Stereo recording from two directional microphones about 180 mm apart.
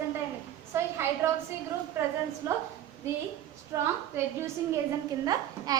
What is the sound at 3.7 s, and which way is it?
A woman's voice, 15° right (ahead or behind).